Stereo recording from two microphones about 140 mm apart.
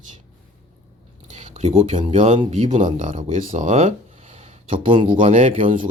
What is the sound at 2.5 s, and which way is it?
Speech, 55° right (ahead or behind).